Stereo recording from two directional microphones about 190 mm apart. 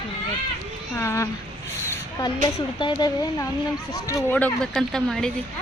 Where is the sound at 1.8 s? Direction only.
15° left (ahead or behind).